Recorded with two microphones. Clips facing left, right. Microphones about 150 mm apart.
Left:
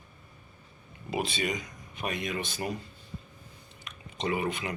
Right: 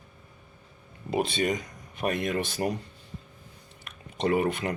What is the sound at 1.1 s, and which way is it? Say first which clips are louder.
Speech: right 5 dB; 45° right (ahead or behind).